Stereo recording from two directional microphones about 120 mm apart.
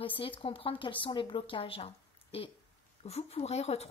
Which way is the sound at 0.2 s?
50° left (ahead or behind).